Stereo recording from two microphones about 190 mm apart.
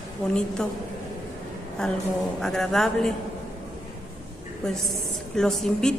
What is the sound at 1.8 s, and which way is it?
A woman's voice, 5° left (ahead or behind).